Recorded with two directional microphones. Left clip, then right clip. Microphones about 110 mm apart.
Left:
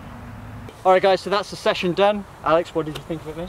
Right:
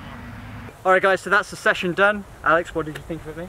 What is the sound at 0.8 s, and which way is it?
Speech, 5° right (ahead or behind).